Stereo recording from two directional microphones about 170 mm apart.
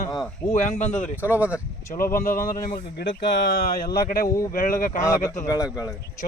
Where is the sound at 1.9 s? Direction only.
55° left (ahead or behind).